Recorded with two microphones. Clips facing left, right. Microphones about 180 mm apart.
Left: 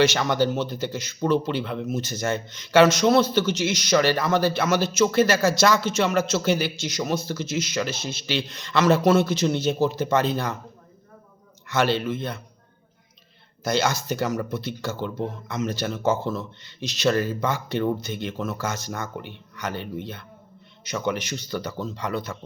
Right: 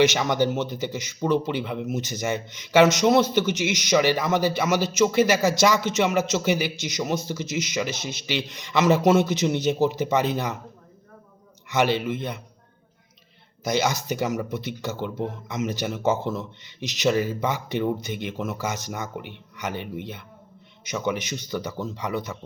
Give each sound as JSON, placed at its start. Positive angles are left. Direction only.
{"t": 0.0, "sound": "speech", "side_deg": -20}
{"t": 11.7, "sound": "speech", "side_deg": -15}
{"t": 13.7, "sound": "speech", "side_deg": -15}